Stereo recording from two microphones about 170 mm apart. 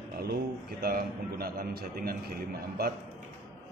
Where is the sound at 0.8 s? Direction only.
65° right (ahead or behind).